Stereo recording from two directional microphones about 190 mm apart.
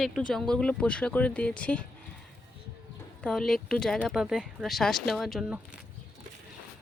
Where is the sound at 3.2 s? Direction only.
Centre (ahead or behind).